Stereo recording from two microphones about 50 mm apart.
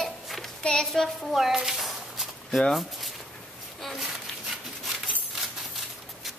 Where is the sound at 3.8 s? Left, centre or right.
Centre.